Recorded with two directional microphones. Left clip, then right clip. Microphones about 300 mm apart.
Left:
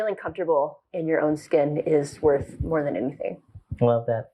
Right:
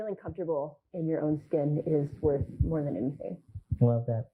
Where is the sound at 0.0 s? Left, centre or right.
Centre.